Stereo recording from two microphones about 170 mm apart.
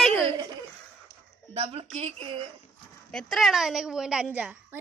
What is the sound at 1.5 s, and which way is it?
Speech, 35° right (ahead or behind).